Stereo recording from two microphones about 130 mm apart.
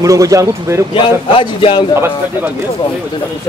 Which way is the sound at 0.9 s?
40° left (ahead or behind).